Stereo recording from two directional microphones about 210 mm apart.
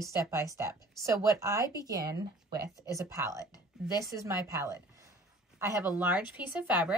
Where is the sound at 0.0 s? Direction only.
15° right (ahead or behind).